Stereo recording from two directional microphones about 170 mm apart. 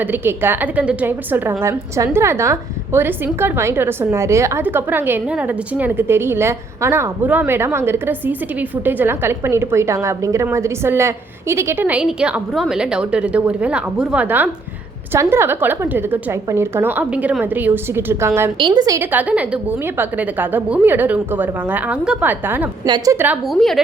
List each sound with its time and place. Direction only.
0.0 s a woman's voice: 10° right (ahead or behind)
19.1 s a woman's voice: 10° right (ahead or behind)